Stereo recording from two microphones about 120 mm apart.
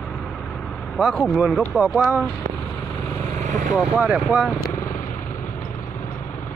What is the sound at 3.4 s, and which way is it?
Vehicle, 90° right.